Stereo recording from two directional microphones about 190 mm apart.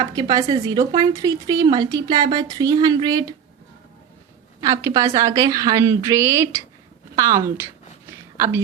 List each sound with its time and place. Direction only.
0.0 s speech: 20° right (ahead or behind)
4.6 s a woman's voice: 15° right (ahead or behind)
8.1 s whispering: 15° right (ahead or behind)